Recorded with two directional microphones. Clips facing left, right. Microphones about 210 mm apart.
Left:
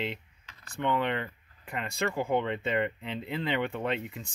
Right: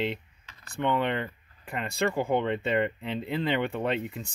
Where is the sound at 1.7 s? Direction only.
35° right (ahead or behind).